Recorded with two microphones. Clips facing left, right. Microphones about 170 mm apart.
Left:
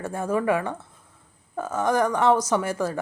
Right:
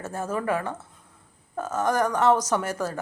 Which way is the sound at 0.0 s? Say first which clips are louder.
Left 4 dB; 15° left (ahead or behind).